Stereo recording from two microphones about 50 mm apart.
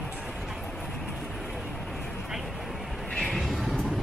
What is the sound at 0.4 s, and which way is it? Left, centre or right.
Train, centre.